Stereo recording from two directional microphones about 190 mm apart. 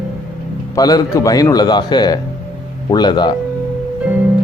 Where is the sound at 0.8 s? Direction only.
20° left (ahead or behind).